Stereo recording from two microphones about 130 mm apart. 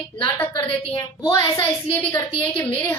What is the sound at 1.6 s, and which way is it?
A woman's voice, 15° left (ahead or behind).